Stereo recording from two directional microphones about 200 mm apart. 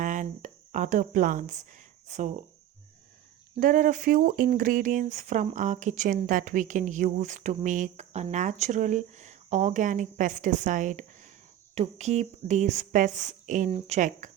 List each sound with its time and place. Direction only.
0.0 s a sound: 40° right (ahead or behind)
2.0 s speech: 35° right (ahead or behind)
3.6 s speech: 40° right (ahead or behind)